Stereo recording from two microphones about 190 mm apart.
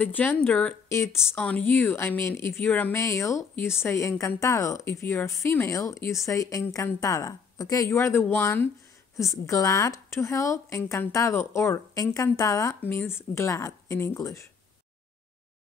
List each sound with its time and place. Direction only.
0.0 s speech: 10° left (ahead or behind)
1.1 s speech: centre (ahead or behind)